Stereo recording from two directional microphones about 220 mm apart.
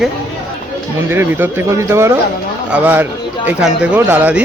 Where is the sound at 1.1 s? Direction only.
10° right (ahead or behind).